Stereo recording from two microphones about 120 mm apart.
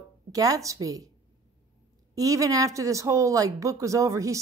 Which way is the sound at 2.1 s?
30° right (ahead or behind).